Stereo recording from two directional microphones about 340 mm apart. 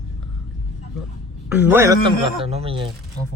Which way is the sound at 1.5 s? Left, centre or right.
Centre.